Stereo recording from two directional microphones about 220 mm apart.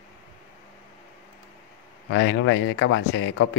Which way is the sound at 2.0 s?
55° left (ahead or behind).